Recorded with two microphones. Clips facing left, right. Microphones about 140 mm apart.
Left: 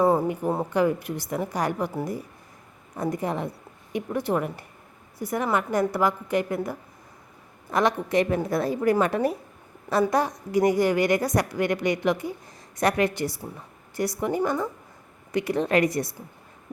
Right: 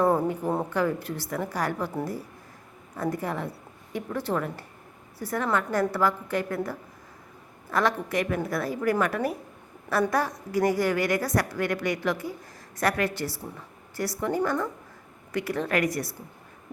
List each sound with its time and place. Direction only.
0.0 s a woman's voice: 5° left (ahead or behind)
2.9 s a woman's voice: 15° left (ahead or behind)